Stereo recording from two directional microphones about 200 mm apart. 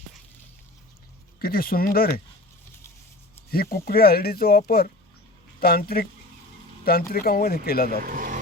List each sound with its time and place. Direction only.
1.4 s speech: 50° left (ahead or behind)
3.5 s speech: 50° left (ahead or behind)
7.1 s speech: 50° left (ahead or behind)
8.0 s speech: 45° right (ahead or behind)